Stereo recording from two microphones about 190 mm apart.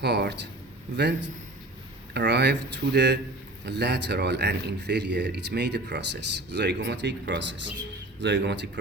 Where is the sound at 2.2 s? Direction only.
65° right (ahead or behind).